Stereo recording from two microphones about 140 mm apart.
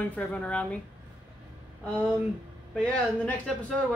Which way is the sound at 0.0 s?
10° left (ahead or behind).